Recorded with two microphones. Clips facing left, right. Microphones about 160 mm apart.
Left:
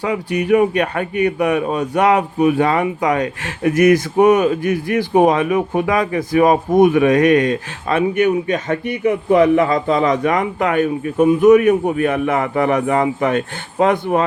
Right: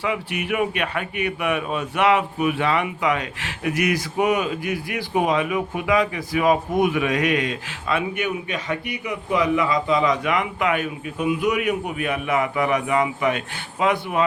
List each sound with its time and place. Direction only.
0.0 s a man's voice: 40° left (ahead or behind)